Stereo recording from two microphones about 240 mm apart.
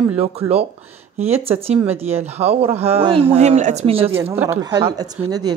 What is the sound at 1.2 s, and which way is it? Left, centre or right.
Speech, right.